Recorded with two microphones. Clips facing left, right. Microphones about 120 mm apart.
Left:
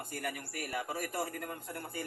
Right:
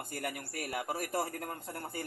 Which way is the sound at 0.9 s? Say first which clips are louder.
Right 2 dB; 35° right (ahead or behind).